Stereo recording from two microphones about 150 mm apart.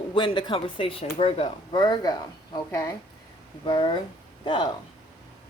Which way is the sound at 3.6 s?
35° left (ahead or behind).